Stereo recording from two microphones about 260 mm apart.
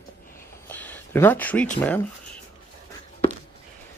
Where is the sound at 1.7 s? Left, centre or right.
Centre.